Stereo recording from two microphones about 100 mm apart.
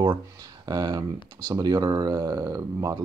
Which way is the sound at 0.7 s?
40° right (ahead or behind).